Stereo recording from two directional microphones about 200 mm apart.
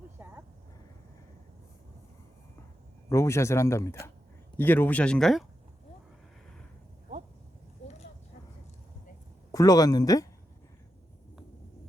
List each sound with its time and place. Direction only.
0.2 s a sound: 10° right (ahead or behind)
3.1 s speech: 15° left (ahead or behind)
9.5 s speech: 15° left (ahead or behind)